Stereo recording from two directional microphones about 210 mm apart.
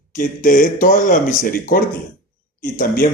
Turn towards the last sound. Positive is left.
turn(degrees=40)  # may be behind; listen again after turning